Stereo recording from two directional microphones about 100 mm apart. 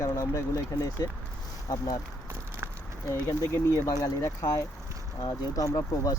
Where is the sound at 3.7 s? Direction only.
35° left (ahead or behind).